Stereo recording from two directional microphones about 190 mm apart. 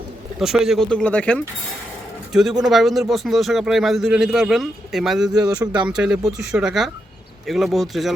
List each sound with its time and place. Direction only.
0.3 s speech: 5° right (ahead or behind)
5.3 s speech: 20° right (ahead or behind)
5.9 s speech: 5° right (ahead or behind)